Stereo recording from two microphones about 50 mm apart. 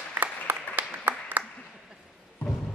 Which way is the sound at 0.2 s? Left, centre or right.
Right.